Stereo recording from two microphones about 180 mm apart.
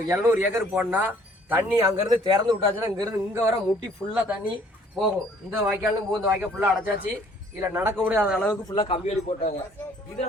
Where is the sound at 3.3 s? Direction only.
15° right (ahead or behind).